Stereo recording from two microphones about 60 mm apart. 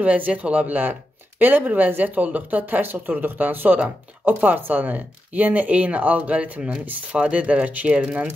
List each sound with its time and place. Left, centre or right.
0.0 s speech: right